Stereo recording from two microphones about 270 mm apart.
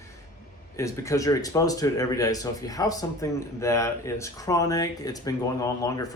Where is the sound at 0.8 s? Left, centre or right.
Centre.